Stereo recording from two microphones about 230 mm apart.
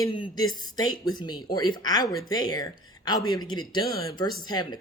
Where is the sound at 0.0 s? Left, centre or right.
Centre.